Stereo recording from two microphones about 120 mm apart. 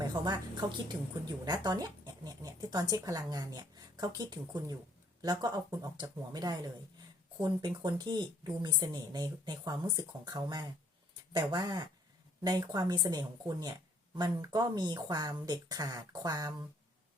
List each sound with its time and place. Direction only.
0.0 s a woman's voice: 35° right (ahead or behind)